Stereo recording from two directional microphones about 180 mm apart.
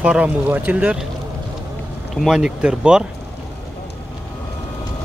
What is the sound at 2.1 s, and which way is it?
Speech, 5° right (ahead or behind).